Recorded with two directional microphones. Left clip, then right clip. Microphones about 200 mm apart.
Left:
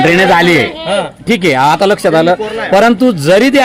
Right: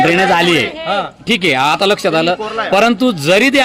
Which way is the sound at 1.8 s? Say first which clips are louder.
Left 4 dB; centre (ahead or behind).